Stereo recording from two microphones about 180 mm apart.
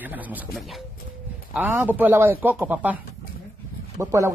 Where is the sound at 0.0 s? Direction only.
10° right (ahead or behind).